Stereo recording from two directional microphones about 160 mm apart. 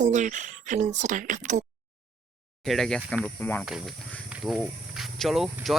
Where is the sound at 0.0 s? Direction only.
50° right (ahead or behind).